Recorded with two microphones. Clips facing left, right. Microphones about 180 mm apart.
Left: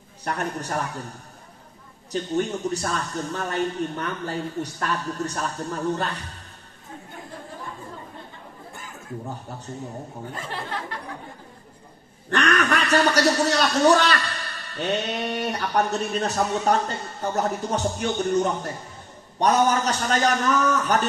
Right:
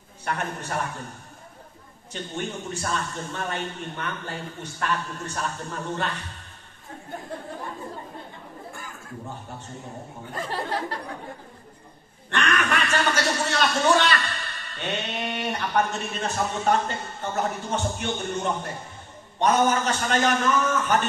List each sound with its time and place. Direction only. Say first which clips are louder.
0.2 s a man's voice: left 2 dB; 40° left (ahead or behind)
2.3 s a man's voice: left 7 dB; 40° left (ahead or behind)
12.3 s a man's voice: left 3 dB; 40° left (ahead or behind)